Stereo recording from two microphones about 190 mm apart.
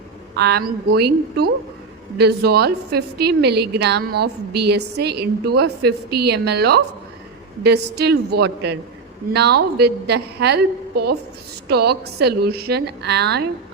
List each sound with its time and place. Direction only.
0.3 s a woman's voice: 60° right (ahead or behind)